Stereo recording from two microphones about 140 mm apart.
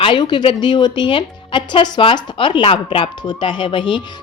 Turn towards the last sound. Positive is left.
turn(degrees=35)  # may be behind; listen again after turning